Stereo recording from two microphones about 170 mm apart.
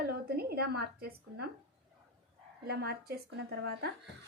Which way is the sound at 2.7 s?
65° right (ahead or behind).